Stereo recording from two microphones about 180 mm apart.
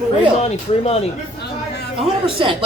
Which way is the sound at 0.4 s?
35° left (ahead or behind).